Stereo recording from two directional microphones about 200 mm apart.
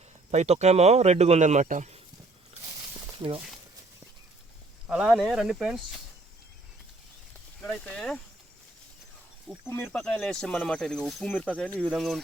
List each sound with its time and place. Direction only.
0.3 s speech: 35° right (ahead or behind)
4.9 s speech: 5° right (ahead or behind)
7.6 s speech: 5° left (ahead or behind)
9.6 s speech: 10° left (ahead or behind)